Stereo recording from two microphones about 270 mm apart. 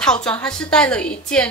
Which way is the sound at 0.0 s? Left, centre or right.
Centre.